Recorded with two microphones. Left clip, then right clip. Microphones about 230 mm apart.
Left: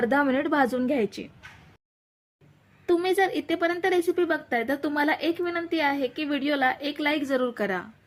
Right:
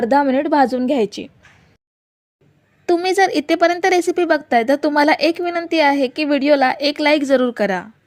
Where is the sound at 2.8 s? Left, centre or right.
Right.